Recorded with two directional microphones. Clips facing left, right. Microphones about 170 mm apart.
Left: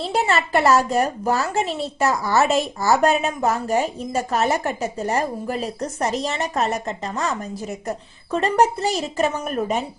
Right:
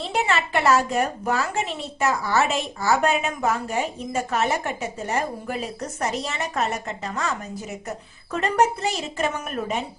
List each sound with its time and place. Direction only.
0.1 s a woman's voice: 35° left (ahead or behind)